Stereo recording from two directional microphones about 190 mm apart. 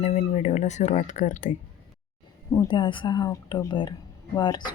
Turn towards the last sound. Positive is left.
turn(degrees=20)  # may be behind; listen again after turning